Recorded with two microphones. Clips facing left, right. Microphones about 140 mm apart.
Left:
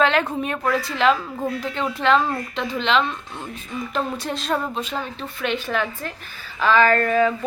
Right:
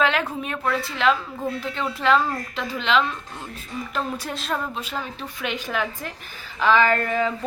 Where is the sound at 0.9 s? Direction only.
Centre (ahead or behind).